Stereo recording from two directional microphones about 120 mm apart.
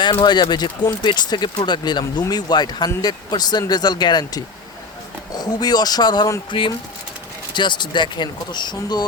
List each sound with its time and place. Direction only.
0.0 s speech: 40° left (ahead or behind)